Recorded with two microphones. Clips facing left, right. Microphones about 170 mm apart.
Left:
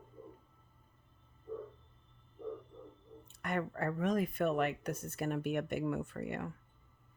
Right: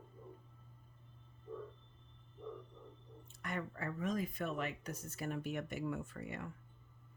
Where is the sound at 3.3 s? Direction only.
60° left (ahead or behind).